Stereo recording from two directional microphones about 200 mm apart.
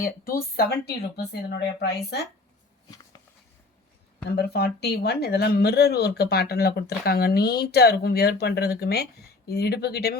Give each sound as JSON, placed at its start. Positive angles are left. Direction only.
{"t": 0.0, "sound": "speech", "side_deg": 45}
{"t": 4.3, "sound": "speech", "side_deg": 50}